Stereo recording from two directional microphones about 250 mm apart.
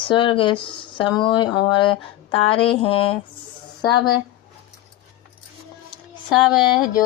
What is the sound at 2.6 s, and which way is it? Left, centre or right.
Speech, left.